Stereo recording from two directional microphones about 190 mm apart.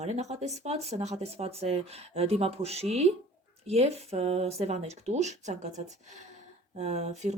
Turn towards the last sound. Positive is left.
turn(degrees=-35)  # may be behind; listen again after turning